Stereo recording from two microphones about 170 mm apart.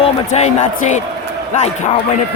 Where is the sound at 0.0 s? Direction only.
40° left (ahead or behind).